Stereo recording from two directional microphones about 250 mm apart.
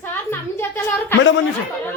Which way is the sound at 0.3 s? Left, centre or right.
Centre.